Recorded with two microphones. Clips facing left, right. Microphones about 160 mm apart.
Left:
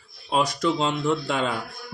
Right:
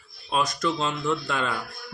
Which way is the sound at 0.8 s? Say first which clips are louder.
Left 3 dB; 25° left (ahead or behind).